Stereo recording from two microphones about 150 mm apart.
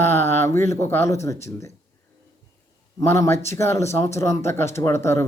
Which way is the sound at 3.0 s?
20° left (ahead or behind).